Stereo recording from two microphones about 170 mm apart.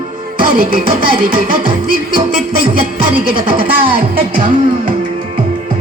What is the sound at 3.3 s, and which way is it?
Speech, 30° right (ahead or behind).